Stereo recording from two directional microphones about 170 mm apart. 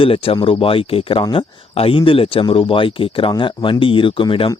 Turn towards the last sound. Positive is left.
turn(degrees=30)  # may be behind; listen again after turning